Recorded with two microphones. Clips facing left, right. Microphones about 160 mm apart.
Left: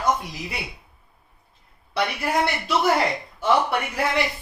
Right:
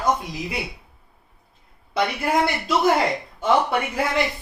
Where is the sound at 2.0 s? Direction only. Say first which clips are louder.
Right 2 dB; 20° right (ahead or behind).